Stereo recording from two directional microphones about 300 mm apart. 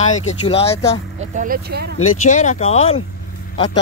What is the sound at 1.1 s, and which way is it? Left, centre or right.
Speech, right.